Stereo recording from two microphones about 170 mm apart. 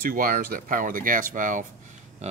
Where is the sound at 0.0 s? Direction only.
60° right (ahead or behind).